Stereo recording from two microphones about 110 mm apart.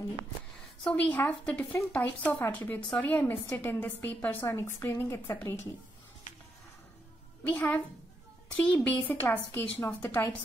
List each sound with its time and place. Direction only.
0.8 s speech: 15° left (ahead or behind)
7.4 s speech: 15° left (ahead or behind)